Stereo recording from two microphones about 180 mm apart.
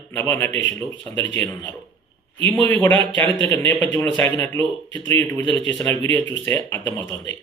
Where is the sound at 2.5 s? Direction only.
10° left (ahead or behind).